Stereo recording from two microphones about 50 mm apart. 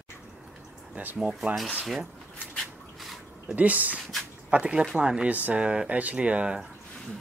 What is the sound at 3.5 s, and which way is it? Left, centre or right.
Speech, right.